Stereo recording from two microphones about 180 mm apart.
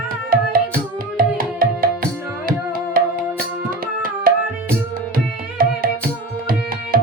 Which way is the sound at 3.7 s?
50° right (ahead or behind).